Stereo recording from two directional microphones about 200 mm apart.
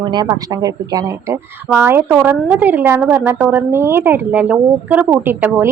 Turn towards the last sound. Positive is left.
turn(degrees=-10)  # may be behind; listen again after turning